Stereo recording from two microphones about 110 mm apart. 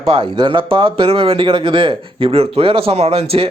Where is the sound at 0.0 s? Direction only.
55° right (ahead or behind).